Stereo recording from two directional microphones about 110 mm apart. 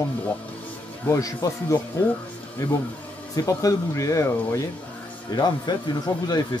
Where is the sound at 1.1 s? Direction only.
30° left (ahead or behind).